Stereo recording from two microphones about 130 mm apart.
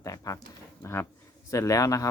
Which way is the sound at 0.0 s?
25° left (ahead or behind).